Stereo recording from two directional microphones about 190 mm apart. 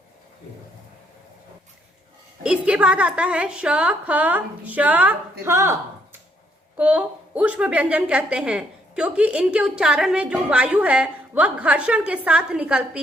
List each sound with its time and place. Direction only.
2.4 s a woman's voice: 5° right (ahead or behind)
6.7 s a woman's voice: 5° right (ahead or behind)